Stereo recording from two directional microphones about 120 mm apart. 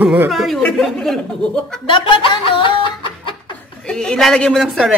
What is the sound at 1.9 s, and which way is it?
Speech, 45° left (ahead or behind).